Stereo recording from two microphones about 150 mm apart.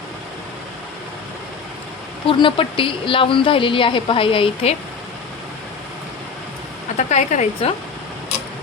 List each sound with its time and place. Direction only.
2.2 s a woman's voice: 35° left (ahead or behind)
6.9 s a woman's voice: 50° left (ahead or behind)